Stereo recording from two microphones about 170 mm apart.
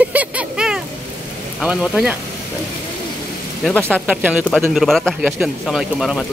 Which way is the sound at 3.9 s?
10° right (ahead or behind).